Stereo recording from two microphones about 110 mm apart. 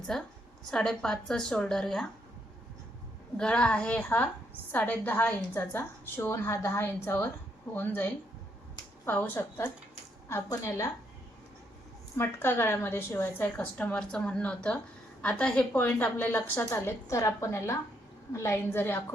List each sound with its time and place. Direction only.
0.7 s a woman's voice: 5° left (ahead or behind)
3.3 s a woman's voice: 10° left (ahead or behind); by 10.9 s 25° left (ahead or behind)
12.1 s a woman's voice: 20° left (ahead or behind)